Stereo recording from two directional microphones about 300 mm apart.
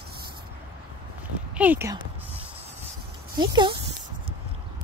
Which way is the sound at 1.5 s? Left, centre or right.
Centre.